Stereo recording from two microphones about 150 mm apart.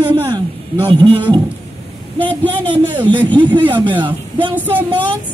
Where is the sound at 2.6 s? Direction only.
35° right (ahead or behind).